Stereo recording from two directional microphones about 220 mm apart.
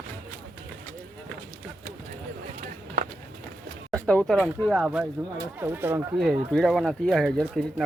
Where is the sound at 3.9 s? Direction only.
5° left (ahead or behind).